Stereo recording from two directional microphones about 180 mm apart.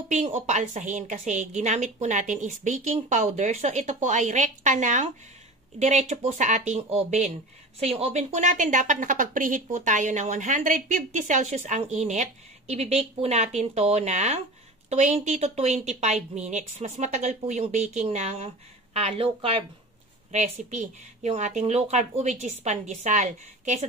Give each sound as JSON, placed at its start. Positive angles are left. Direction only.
{"t": 0.1, "sound": "a woman's voice", "side_deg": -40}